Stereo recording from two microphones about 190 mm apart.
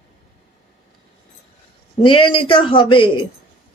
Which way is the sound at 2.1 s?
25° left (ahead or behind).